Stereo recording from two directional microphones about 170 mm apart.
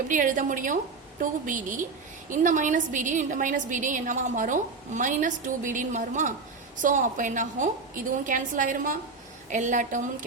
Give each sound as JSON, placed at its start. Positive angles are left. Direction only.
{"t": 0.1, "sound": "a woman's voice", "side_deg": -50}